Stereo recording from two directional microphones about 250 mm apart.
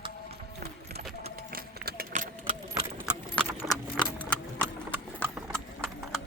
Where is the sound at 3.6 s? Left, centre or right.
Centre.